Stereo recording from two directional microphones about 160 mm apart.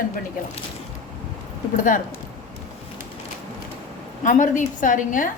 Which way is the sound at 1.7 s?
55° left (ahead or behind).